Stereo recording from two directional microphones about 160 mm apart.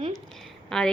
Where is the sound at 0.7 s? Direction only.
5° left (ahead or behind).